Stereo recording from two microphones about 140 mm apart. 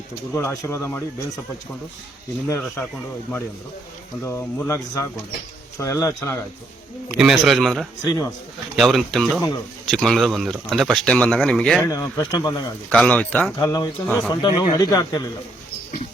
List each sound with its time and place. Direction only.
0.3 s speech: 20° left (ahead or behind)
2.5 s speech: 15° left (ahead or behind)
4.2 s speech: 20° left (ahead or behind)
7.1 s speech: 5° right (ahead or behind)
8.0 s speech: 25° left (ahead or behind)
8.7 s speech: centre (ahead or behind)
11.9 s speech: 25° left (ahead or behind)
12.9 s speech: 10° left (ahead or behind)
13.6 s speech: 30° left (ahead or behind)